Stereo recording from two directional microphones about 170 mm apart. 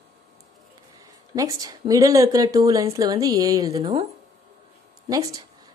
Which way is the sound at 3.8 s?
35° right (ahead or behind).